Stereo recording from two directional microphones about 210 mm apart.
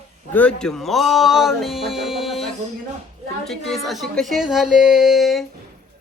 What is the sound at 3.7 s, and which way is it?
Speech, centre (ahead or behind).